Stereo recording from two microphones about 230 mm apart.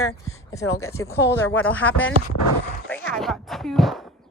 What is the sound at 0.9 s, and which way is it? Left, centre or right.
A woman's voice, centre.